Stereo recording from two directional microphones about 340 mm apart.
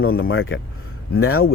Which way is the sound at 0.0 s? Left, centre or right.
Left.